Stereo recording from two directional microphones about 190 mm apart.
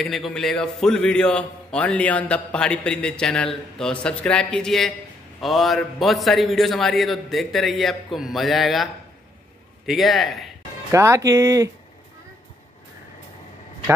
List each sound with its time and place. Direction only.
0.0 s a man's voice: centre (ahead or behind)
9.8 s a man's voice: centre (ahead or behind)
10.9 s speech: 15° right (ahead or behind)